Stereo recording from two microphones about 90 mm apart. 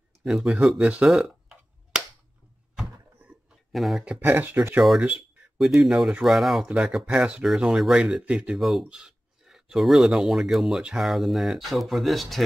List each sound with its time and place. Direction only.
0.2 s speech: 5° right (ahead or behind)
1.0 s a sound: 5° right (ahead or behind)
3.7 s speech: centre (ahead or behind)
4.2 s speech: 20° right (ahead or behind)
5.6 s speech: centre (ahead or behind)
8.5 s speech: centre (ahead or behind)